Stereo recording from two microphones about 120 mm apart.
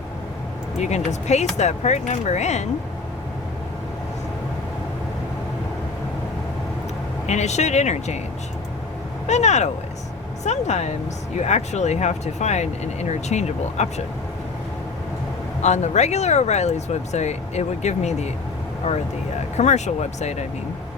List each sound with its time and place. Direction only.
0.8 s speech: 70° left (ahead or behind)
7.3 s speech: 70° left (ahead or behind)
9.2 s speech: 70° left (ahead or behind)
15.6 s speech: 70° left (ahead or behind)